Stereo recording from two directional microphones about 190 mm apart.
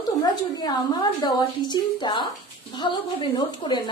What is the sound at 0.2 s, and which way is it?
A woman's voice, 20° left (ahead or behind).